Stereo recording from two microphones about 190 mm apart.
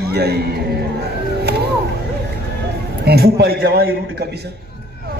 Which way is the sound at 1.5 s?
60° right (ahead or behind).